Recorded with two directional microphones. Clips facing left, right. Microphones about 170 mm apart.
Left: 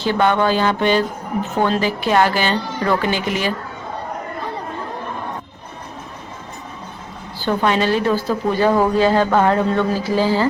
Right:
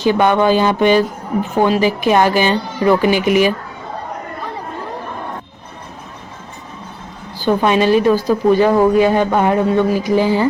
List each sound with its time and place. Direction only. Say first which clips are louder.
0.0 s speech: right 4 dB; 15° right (ahead or behind)
7.3 s speech: right 4 dB; 15° right (ahead or behind)